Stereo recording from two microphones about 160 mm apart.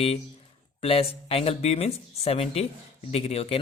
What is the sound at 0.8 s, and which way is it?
Speech, 35° left (ahead or behind).